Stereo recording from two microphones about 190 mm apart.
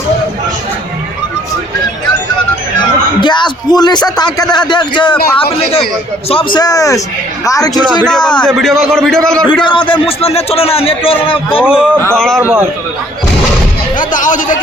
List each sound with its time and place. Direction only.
3.2 s a man's voice: 25° left (ahead or behind)
8.0 s a man's voice: 5° left (ahead or behind)
9.6 s a man's voice: 25° left (ahead or behind)
11.6 s a man's voice: 5° right (ahead or behind)
12.4 s a man's voice: 10° right (ahead or behind)
14.0 s speech: 45° left (ahead or behind)